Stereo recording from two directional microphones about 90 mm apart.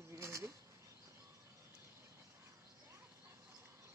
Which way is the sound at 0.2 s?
35° right (ahead or behind).